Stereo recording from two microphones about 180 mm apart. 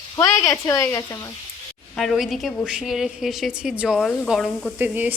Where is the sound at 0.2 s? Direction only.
20° left (ahead or behind).